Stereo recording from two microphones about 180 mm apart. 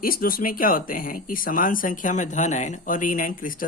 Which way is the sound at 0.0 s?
55° left (ahead or behind).